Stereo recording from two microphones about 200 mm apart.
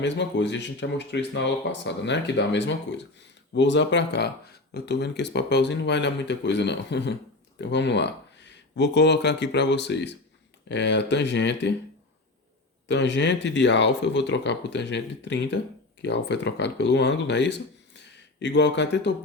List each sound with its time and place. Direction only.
0.0 s speech: 60° left (ahead or behind)
12.9 s speech: 60° left (ahead or behind)